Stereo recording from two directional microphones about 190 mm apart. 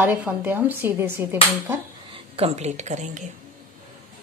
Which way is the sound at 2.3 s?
35° right (ahead or behind).